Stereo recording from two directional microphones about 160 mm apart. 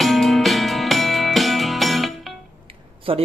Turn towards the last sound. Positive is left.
turn(degrees=-35)  # may be behind; listen again after turning